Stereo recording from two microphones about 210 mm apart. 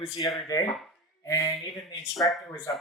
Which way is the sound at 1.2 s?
15° left (ahead or behind).